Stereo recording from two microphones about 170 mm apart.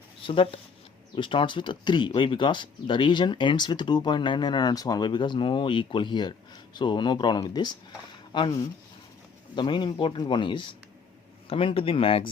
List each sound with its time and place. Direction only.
0.2 s speech: 30° left (ahead or behind)